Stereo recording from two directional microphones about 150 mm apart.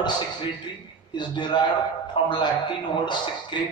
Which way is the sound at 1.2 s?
30° left (ahead or behind).